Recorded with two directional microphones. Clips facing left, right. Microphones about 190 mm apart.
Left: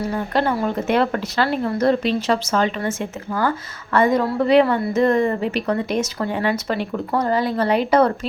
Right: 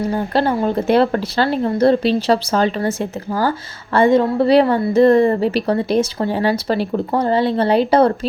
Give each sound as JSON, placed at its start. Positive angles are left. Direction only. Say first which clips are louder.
{"t": 0.1, "sound": "a woman's voice", "louder": "right 2 dB", "side_deg": -30}